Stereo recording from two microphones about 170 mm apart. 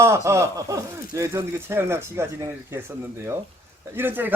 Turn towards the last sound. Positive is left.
turn(degrees=-10)  # may be behind; listen again after turning